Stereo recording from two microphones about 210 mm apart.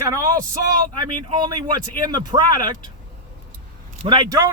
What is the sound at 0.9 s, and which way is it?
A man's voice, 20° right (ahead or behind).